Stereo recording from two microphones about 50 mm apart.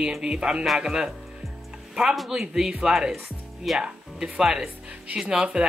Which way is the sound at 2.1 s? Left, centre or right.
Centre.